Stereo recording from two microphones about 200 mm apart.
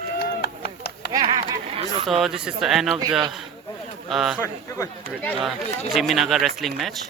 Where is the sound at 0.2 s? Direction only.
55° left (ahead or behind).